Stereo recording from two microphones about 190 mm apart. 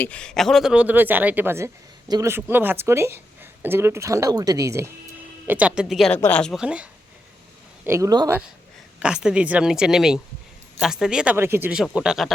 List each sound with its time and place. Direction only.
0.0 s speech: 5° left (ahead or behind)
7.9 s speech: 15° right (ahead or behind)
9.0 s speech: 5° right (ahead or behind)